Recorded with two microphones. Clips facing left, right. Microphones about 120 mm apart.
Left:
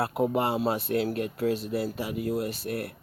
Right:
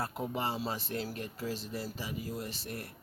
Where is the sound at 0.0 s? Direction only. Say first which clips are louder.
Left 9 dB; 65° left (ahead or behind).